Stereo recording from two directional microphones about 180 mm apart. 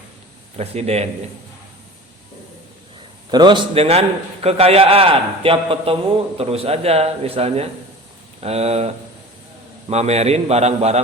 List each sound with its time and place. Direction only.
0.5 s a man's voice: 35° right (ahead or behind)
3.3 s a man's voice: 25° right (ahead or behind)
9.9 s a man's voice: 35° right (ahead or behind)